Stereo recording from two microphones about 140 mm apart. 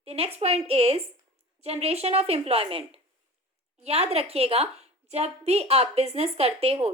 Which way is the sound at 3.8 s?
45° right (ahead or behind).